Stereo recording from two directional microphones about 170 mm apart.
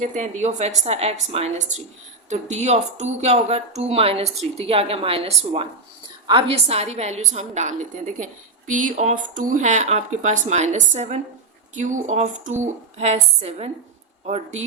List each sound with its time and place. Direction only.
0.0 s a woman's voice: 50° right (ahead or behind)